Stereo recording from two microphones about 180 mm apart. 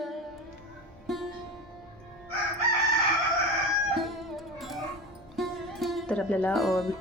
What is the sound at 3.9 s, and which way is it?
Music, centre (ahead or behind).